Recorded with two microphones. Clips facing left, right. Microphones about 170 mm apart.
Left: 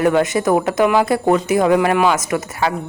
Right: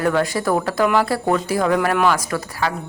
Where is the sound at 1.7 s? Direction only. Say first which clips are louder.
Left 3 dB; 10° left (ahead or behind).